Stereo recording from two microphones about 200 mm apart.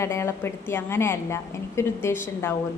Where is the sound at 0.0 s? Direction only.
15° left (ahead or behind).